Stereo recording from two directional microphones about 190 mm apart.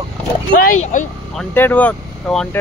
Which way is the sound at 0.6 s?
40° left (ahead or behind).